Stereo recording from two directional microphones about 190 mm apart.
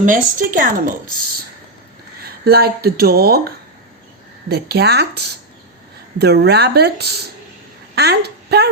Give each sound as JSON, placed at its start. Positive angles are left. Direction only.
{"t": 0.0, "sound": "speech", "side_deg": -45}
{"t": 2.2, "sound": "speech", "side_deg": -55}
{"t": 4.4, "sound": "a woman's voice", "side_deg": -55}